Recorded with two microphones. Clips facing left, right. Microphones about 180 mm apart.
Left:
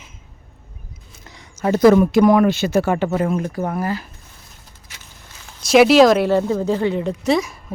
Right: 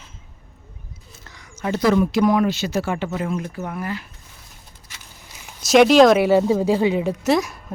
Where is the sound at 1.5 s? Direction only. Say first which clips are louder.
Left 6 dB; 45° left (ahead or behind).